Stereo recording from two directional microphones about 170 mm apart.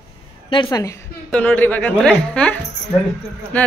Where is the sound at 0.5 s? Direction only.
25° left (ahead or behind).